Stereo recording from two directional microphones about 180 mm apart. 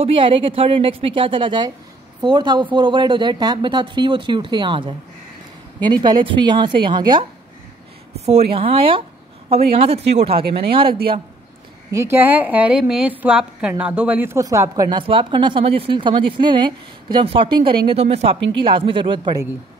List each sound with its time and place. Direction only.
0.0 s a woman's voice: 30° right (ahead or behind)
8.3 s speech: 35° right (ahead or behind)
11.9 s a woman's voice: 15° right (ahead or behind)